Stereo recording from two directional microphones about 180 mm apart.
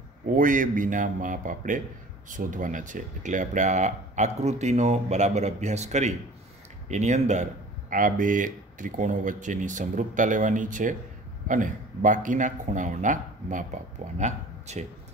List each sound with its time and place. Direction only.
0.4 s speech: 45° right (ahead or behind)